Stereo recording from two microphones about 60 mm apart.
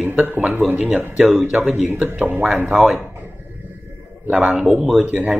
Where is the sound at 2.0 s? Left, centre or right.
Right.